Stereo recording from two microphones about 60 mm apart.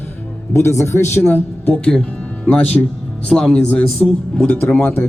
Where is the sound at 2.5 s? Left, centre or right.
Left.